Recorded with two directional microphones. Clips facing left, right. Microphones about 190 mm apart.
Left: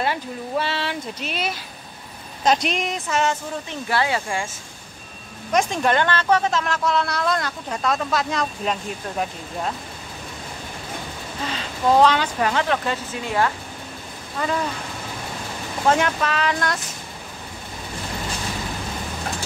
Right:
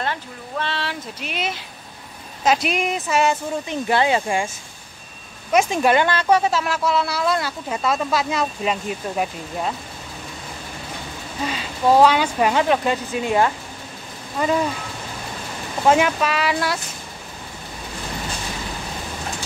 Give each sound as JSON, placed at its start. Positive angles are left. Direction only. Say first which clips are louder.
{"t": 0.0, "sound": "speech", "louder": "left 3 dB", "side_deg": 10}
{"t": 1.2, "sound": "speech", "louder": "right 1 dB", "side_deg": -20}
{"t": 2.4, "sound": "speech", "louder": "right 1 dB", "side_deg": -5}
{"t": 5.5, "sound": "speech", "louder": "right 3 dB", "side_deg": -10}
{"t": 11.4, "sound": "speech", "louder": "right 2 dB", "side_deg": -10}
{"t": 15.9, "sound": "speech", "louder": "right 3 dB", "side_deg": -10}